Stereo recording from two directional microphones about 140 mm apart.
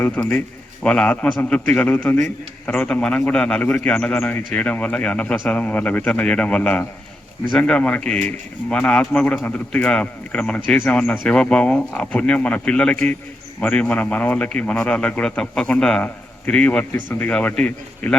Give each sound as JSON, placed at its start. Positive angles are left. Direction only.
{"t": 0.0, "sound": "a man's voice", "side_deg": 10}